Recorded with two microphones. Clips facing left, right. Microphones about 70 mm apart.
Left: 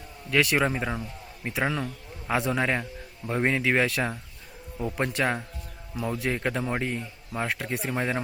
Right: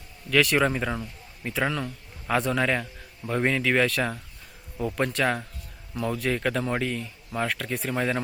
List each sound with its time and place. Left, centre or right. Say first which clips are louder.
0.3 s speech: right 2 dB; centre
3.8 s a man's voice: right 1 dB; centre
6.3 s speech: right 2 dB; centre